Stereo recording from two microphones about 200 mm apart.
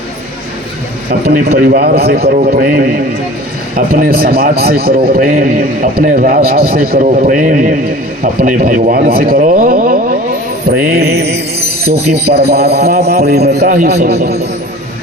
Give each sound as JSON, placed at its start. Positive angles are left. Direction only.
{"t": 1.6, "sound": "a man's voice", "side_deg": -45}
{"t": 10.7, "sound": "music", "side_deg": -55}
{"t": 11.9, "sound": "a man's voice", "side_deg": -55}